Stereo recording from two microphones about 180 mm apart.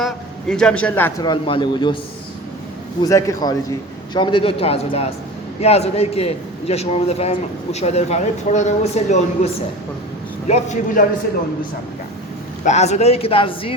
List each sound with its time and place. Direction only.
0.0 s a man's voice: 5° left (ahead or behind)
1.2 s a man's voice: 25° left (ahead or behind)
3.0 s a man's voice: 15° left (ahead or behind); by 9.5 s 40° left (ahead or behind)
10.5 s a man's voice: 40° left (ahead or behind)
12.6 s a man's voice: 40° left (ahead or behind)